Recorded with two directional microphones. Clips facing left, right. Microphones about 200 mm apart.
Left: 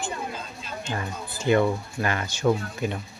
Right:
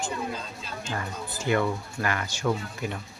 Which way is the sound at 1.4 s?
25° left (ahead or behind).